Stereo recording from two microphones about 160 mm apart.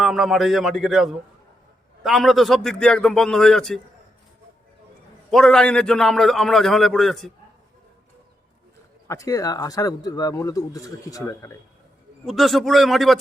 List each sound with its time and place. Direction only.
0.0 s a man's voice: centre (ahead or behind)
5.3 s a man's voice: 5° left (ahead or behind)
9.0 s speech: 20° left (ahead or behind)
12.2 s a man's voice: centre (ahead or behind)